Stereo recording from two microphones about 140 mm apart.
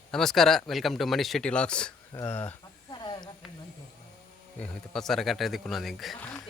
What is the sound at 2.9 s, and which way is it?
Snake, 30° left (ahead or behind).